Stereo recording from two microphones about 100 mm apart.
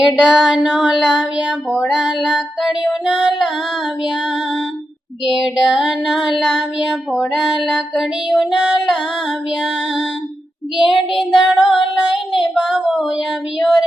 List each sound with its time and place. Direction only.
0.0 s female singing: centre (ahead or behind)
5.2 s female singing: 5° right (ahead or behind)
10.8 s female singing: centre (ahead or behind)
11.8 s child singing: 60° left (ahead or behind)
12.4 s child singing: 5° left (ahead or behind)
13.6 s female singing: centre (ahead or behind)